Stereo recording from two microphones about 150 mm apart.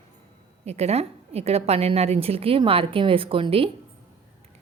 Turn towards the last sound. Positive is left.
turn(degrees=-35)  # may be behind; listen again after turning